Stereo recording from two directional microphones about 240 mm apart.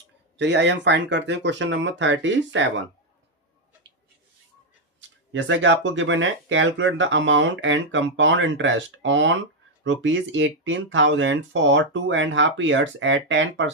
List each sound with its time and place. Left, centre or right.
0.3 s speech: right
4.9 s speech: right